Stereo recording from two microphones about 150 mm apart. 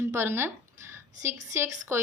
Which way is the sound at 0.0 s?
15° right (ahead or behind).